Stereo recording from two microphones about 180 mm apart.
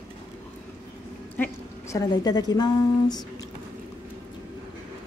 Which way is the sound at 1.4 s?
10° left (ahead or behind).